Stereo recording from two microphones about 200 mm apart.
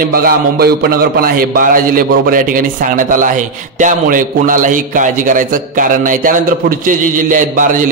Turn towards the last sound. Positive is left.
turn(degrees=-40)  # may be behind; listen again after turning